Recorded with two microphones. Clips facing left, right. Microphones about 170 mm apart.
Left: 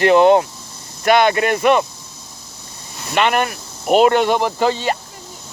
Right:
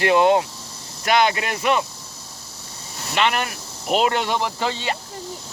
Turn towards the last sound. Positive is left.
turn(degrees=45)  # may be behind; listen again after turning